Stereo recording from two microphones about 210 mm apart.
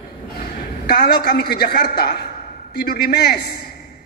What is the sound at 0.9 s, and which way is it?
A man's voice, 50° left (ahead or behind).